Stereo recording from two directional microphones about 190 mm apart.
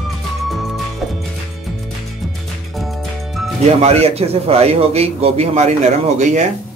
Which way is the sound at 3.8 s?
35° right (ahead or behind).